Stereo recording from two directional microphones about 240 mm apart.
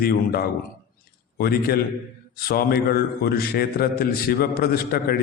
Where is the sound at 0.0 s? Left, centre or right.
Left.